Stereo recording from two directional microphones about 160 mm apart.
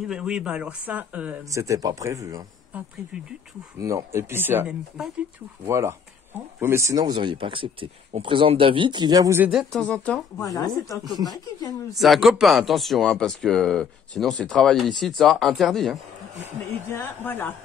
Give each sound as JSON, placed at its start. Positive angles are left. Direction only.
{"t": 0.1, "sound": "speech", "side_deg": -5}
{"t": 1.4, "sound": "speech", "side_deg": -20}
{"t": 3.1, "sound": "speech", "side_deg": -5}
{"t": 5.7, "sound": "speech", "side_deg": -15}
{"t": 9.4, "sound": "speech", "side_deg": 0}
{"t": 10.4, "sound": "speech", "side_deg": 20}
{"t": 11.9, "sound": "speech", "side_deg": 0}
{"t": 16.9, "sound": "speech", "side_deg": 10}